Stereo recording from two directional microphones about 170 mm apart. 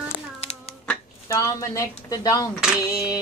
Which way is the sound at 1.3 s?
20° left (ahead or behind).